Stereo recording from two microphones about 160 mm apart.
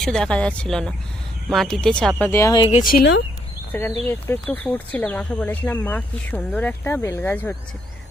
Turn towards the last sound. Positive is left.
turn(degrees=10)  # may be behind; listen again after turning